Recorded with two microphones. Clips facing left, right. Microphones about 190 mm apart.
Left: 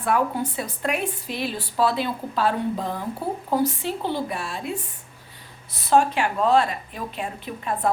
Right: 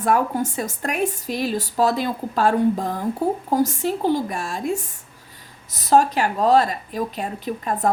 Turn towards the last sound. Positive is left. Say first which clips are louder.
# right 3 dB
turn(degrees=-40)  # may be behind; listen again after turning